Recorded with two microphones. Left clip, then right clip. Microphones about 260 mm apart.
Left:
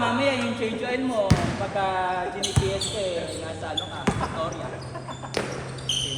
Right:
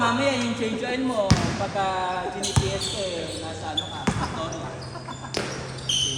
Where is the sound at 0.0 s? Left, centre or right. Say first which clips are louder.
Right 1 dB; right.